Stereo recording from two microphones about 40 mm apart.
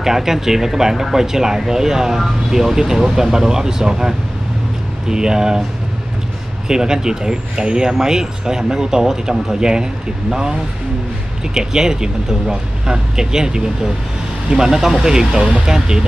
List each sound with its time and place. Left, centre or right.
0.0 s speech: centre
6.7 s speech: centre
11.5 s speech: centre